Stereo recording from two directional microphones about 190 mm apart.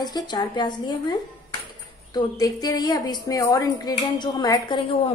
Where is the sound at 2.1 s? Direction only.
20° left (ahead or behind).